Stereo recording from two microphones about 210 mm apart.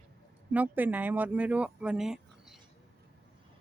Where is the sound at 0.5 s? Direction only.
10° right (ahead or behind).